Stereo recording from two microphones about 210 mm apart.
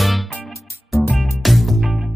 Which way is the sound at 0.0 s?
Centre (ahead or behind).